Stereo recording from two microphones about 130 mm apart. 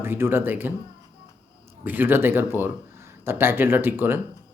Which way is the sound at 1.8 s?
15° right (ahead or behind).